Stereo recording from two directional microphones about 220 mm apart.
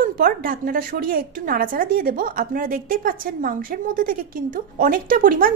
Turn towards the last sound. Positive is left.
turn(degrees=-40)  # may be behind; listen again after turning